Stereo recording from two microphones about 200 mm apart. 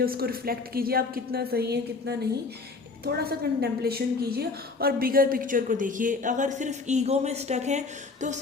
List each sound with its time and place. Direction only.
0.0 s a woman's voice: 50° right (ahead or behind)